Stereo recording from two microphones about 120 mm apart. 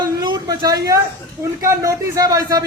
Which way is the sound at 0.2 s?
35° right (ahead or behind).